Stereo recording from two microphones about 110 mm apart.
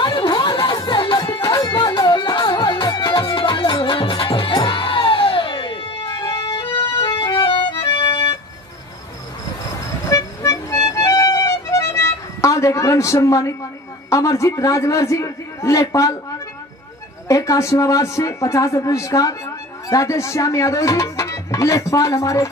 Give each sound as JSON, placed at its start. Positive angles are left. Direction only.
{"t": 0.0, "sound": "music", "side_deg": 45}
{"t": 10.0, "sound": "music", "side_deg": 30}
{"t": 14.1, "sound": "speech", "side_deg": 25}
{"t": 17.3, "sound": "speech", "side_deg": 30}